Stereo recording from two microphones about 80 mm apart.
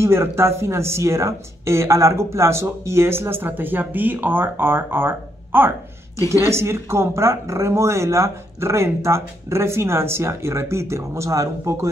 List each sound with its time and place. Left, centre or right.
0.0 s speech: right